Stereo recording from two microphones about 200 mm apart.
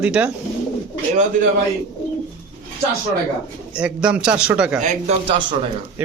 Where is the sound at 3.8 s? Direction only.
5° right (ahead or behind).